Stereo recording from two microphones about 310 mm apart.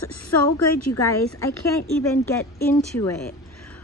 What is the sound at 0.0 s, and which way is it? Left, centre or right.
Speech, left.